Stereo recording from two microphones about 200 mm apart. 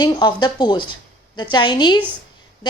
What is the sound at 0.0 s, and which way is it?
A woman's voice, 20° left (ahead or behind).